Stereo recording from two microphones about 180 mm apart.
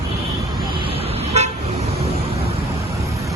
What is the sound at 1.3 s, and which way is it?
Vehicle, 35° right (ahead or behind).